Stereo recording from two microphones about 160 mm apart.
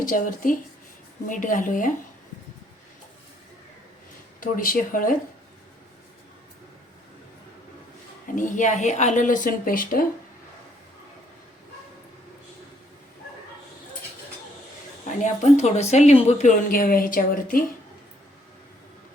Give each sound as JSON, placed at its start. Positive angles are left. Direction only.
{"t": 0.0, "sound": "speech", "side_deg": 55}
{"t": 4.4, "sound": "speech", "side_deg": 60}
{"t": 8.4, "sound": "a woman's voice", "side_deg": 50}
{"t": 15.2, "sound": "a woman's voice", "side_deg": 45}